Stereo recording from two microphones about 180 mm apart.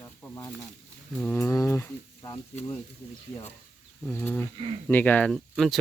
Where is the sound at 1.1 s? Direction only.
10° left (ahead or behind).